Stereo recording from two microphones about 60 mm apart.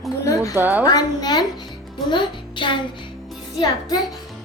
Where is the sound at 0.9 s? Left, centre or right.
Left.